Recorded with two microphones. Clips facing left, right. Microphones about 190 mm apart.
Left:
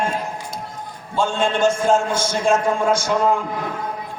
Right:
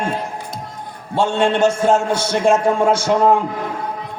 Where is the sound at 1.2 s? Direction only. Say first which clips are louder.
Right 3 dB; 70° right (ahead or behind).